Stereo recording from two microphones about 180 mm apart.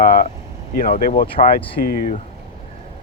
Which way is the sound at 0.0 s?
55° left (ahead or behind).